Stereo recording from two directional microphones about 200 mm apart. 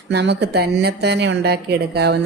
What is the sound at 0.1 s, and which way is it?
Speech, 55° right (ahead or behind).